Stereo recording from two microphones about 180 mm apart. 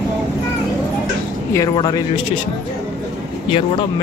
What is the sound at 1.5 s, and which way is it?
Speech, 20° left (ahead or behind).